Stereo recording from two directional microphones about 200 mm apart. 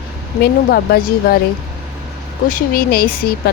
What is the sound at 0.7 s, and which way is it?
Speech, 50° left (ahead or behind).